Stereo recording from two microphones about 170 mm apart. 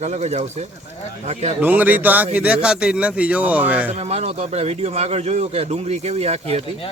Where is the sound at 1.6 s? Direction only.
10° right (ahead or behind).